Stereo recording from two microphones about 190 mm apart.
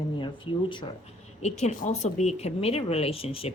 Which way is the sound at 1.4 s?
40° left (ahead or behind).